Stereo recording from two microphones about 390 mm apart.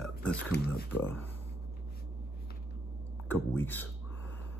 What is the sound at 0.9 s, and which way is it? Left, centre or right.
Speech, centre.